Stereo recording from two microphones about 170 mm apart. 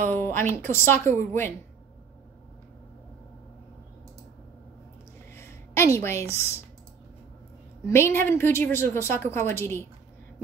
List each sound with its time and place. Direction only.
0.1 s a woman's voice: 10° left (ahead or behind)
5.3 s a sound: 15° left (ahead or behind)
7.8 s a woman's voice: 15° left (ahead or behind)